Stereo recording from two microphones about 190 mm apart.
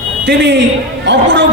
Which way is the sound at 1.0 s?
70° right (ahead or behind).